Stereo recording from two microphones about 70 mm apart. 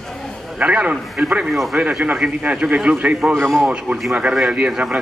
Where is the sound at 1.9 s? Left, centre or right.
Centre.